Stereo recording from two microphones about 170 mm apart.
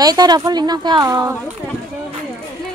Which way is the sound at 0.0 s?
20° right (ahead or behind).